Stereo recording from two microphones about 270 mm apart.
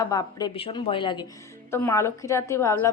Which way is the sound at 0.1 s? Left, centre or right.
Centre.